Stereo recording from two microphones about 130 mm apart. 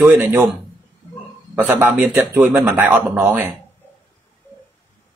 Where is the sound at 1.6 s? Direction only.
15° right (ahead or behind).